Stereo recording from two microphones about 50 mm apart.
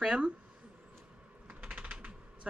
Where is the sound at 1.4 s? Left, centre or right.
Right.